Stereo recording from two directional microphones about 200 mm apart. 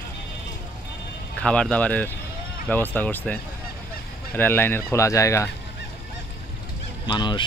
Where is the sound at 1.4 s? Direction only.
5° left (ahead or behind).